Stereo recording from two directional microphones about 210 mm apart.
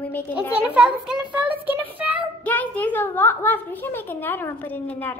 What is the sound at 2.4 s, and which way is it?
A woman's voice, 5° left (ahead or behind).